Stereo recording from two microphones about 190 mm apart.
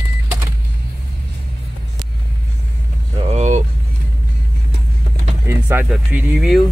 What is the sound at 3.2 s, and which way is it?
Speech, 35° right (ahead or behind).